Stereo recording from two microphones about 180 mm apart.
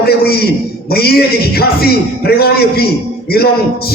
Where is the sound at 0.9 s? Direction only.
60° left (ahead or behind).